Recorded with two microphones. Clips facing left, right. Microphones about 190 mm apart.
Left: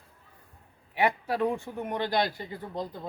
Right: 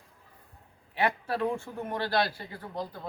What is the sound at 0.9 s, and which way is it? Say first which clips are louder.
Speech: left 2 dB; 15° left (ahead or behind).